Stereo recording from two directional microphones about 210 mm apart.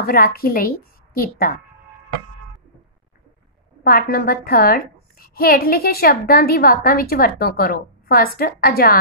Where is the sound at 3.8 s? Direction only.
45° left (ahead or behind).